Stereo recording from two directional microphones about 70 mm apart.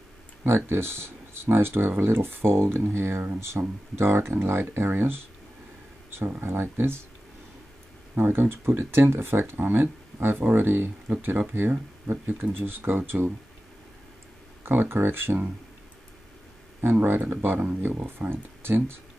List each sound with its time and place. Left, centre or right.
0.5 s speech: right
6.0 s a sound: right
6.4 s speech: right
8.1 s speech: right
14.6 s speech: right
17.0 s speech: right